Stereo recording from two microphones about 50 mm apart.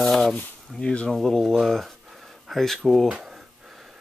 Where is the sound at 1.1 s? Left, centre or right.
Centre.